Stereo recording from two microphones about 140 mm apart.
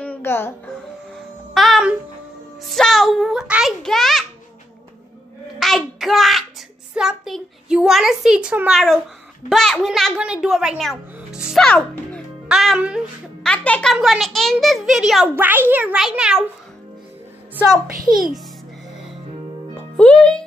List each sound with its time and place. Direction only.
0.0 s music: 15° left (ahead or behind)
1.5 s music: centre (ahead or behind)
2.6 s a child's voice: centre (ahead or behind)
5.6 s a child's voice: centre (ahead or behind)
11.1 s music: 5° right (ahead or behind)
11.6 s speech: 10° left (ahead or behind)
12.4 s a child's voice: 5° right (ahead or behind)
13.4 s a child's voice: 10° left (ahead or behind)
13.9 s a child's voice: centre (ahead or behind)
15.3 s a child's voice: 15° right (ahead or behind)
20.0 s music: 5° left (ahead or behind)